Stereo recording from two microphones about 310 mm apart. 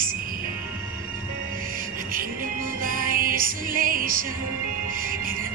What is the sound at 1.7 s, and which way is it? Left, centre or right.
Music, right.